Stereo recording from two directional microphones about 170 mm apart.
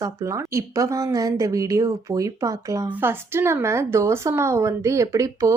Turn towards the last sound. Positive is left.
turn(degrees=-20)  # may be behind; listen again after turning